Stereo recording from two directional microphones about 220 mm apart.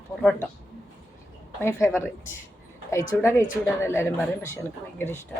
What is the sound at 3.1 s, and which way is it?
Speech, 10° left (ahead or behind).